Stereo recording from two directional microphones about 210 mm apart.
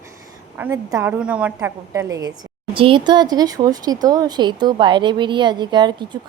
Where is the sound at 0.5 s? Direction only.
10° right (ahead or behind).